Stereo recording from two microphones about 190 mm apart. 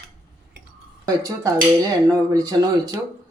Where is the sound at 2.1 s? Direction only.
20° right (ahead or behind).